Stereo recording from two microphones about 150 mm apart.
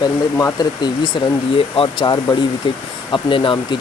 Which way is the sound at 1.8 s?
30° left (ahead or behind).